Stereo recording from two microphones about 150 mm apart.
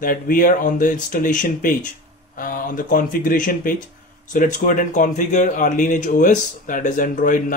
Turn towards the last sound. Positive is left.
turn(degrees=65)  # may be behind; listen again after turning